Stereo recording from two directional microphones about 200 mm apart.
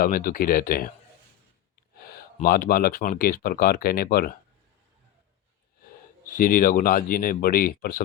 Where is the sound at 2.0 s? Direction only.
50° left (ahead or behind).